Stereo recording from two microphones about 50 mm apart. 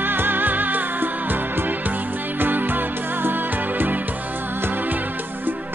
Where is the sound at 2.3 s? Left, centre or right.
Right.